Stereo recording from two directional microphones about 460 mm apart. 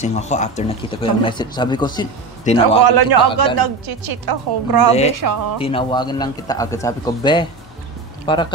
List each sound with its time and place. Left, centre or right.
0.0 s speech: centre
2.8 s a woman's voice: right
5.6 s speech: centre